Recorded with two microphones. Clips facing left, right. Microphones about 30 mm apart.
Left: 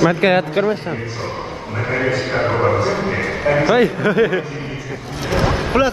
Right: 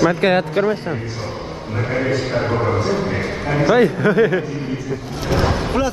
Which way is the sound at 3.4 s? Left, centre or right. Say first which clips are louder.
Left 4 dB; left.